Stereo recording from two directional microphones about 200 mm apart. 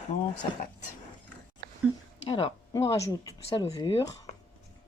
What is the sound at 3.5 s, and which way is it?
Speech, 30° left (ahead or behind).